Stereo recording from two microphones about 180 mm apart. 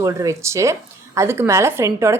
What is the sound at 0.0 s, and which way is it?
A woman's voice, 15° right (ahead or behind).